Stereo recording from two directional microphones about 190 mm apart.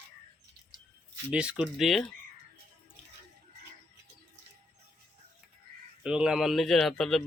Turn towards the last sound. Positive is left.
turn(degrees=0)  # may be behind; listen again after turning